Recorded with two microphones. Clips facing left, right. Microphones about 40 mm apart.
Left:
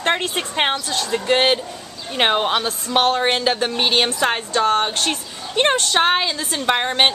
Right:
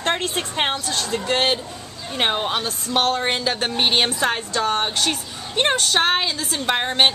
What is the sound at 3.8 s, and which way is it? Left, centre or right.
Speech, centre.